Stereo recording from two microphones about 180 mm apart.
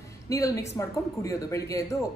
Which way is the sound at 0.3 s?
15° left (ahead or behind).